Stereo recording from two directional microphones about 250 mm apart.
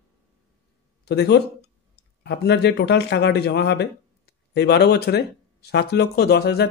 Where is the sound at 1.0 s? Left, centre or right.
Left.